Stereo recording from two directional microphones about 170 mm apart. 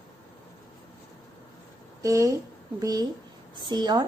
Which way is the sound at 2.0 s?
20° right (ahead or behind).